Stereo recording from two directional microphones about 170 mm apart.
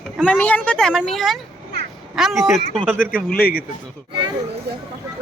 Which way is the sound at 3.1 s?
60° left (ahead or behind).